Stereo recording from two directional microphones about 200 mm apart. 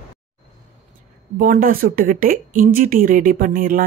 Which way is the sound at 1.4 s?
45° right (ahead or behind).